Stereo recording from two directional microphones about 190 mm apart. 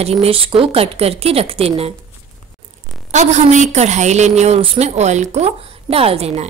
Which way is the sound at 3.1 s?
40° right (ahead or behind).